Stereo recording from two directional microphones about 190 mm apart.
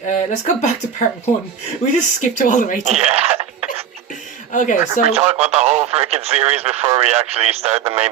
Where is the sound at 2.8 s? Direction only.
35° right (ahead or behind).